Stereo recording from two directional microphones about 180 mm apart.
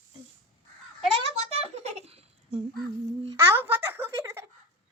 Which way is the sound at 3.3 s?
10° right (ahead or behind).